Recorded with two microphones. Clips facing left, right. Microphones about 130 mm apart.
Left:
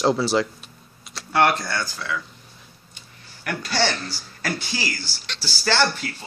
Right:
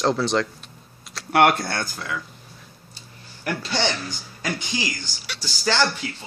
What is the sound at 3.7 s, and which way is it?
Speech, 15° right (ahead or behind).